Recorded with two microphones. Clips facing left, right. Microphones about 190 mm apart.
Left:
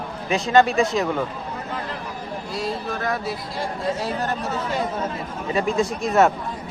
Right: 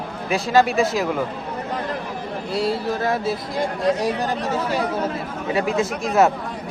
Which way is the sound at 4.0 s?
15° right (ahead or behind).